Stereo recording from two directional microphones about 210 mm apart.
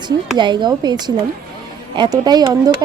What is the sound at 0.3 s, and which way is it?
A woman's voice, 20° right (ahead or behind).